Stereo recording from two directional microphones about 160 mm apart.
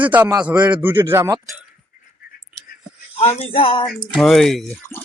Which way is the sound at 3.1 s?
40° left (ahead or behind).